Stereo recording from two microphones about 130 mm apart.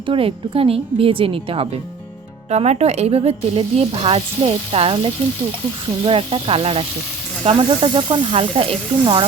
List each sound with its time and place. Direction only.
0.0 s speech: 45° right (ahead or behind)
2.5 s speech: 55° right (ahead or behind)
7.5 s snake: 40° right (ahead or behind)